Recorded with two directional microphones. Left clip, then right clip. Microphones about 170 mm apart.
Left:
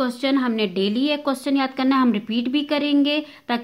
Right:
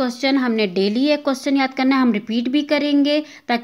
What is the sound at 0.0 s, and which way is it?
A woman's voice, 20° right (ahead or behind).